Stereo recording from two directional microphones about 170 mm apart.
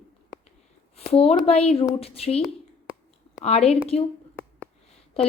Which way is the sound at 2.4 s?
Centre (ahead or behind).